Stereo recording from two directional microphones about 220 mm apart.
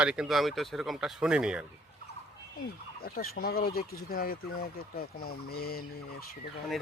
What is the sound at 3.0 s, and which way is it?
Speech, 40° left (ahead or behind).